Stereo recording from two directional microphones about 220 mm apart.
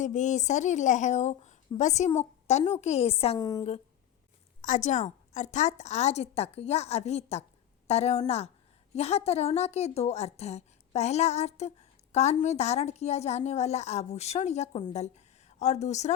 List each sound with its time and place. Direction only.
0.0 s a woman's voice: 35° left (ahead or behind)
4.6 s a woman's voice: 35° left (ahead or behind)